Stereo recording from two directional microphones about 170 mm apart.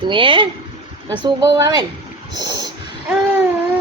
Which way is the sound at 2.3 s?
25° right (ahead or behind).